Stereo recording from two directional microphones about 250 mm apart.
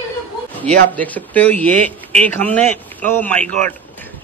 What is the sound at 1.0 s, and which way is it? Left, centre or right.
A man's voice, centre.